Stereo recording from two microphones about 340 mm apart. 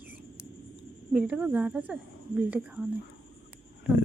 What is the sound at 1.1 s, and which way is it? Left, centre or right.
Speech, centre.